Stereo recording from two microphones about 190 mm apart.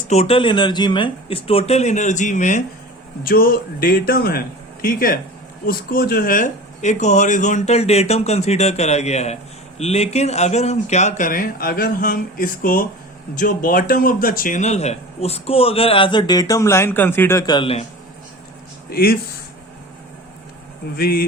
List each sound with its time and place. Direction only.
0.0 s speech: 35° left (ahead or behind)
18.9 s speech: 55° left (ahead or behind)
20.9 s speech: 50° left (ahead or behind)